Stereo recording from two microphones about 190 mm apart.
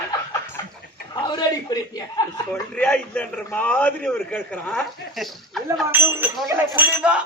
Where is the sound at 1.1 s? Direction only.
20° left (ahead or behind).